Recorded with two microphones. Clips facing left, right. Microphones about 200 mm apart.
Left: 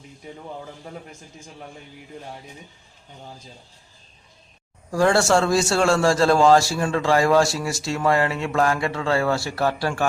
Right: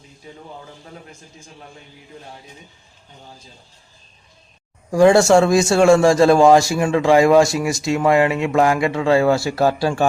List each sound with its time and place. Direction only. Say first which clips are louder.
4.9 s a man's voice: right 7 dB; 15° right (ahead or behind)